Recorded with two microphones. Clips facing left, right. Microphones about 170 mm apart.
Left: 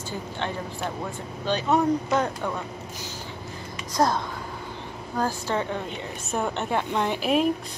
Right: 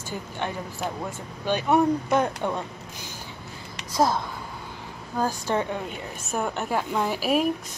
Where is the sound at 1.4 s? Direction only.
15° right (ahead or behind).